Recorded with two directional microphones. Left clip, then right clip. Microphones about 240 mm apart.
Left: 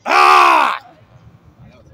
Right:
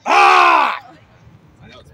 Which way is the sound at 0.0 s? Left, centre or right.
Centre.